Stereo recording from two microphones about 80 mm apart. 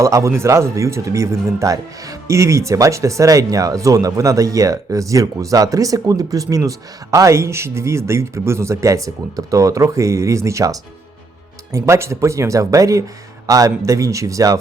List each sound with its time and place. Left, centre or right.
0.0 s speech: right